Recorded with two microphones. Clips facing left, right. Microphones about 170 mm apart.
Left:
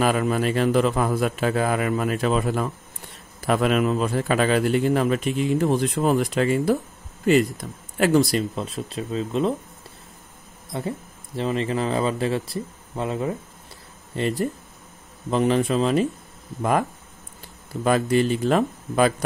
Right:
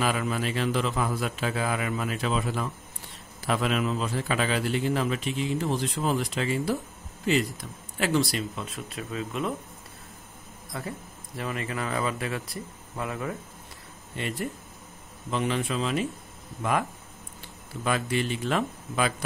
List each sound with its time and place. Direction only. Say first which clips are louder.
0.0 s a man's voice: left 6 dB; 50° left (ahead or behind); by 9.6 s 30° left (ahead or behind)
10.7 s speech: left 7 dB; 25° left (ahead or behind)
17.8 s speech: left 8 dB; 40° left (ahead or behind)